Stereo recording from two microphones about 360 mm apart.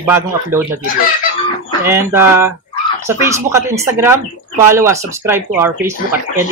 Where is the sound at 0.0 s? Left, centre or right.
Centre.